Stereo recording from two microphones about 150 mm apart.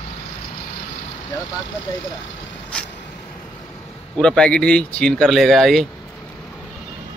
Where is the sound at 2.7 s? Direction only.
10° left (ahead or behind).